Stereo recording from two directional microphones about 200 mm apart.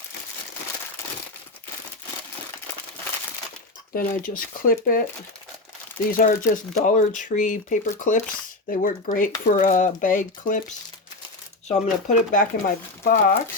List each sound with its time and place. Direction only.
3.9 s speech: 45° left (ahead or behind)
6.1 s speech: 45° left (ahead or behind)